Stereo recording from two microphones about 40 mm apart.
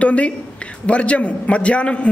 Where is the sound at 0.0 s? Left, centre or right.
Left.